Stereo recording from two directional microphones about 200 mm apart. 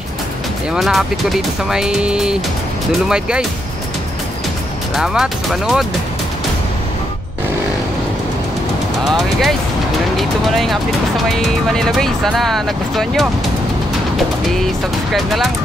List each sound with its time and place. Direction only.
0.7 s speech: centre (ahead or behind)
4.9 s speech: centre (ahead or behind)
9.1 s speech: centre (ahead or behind)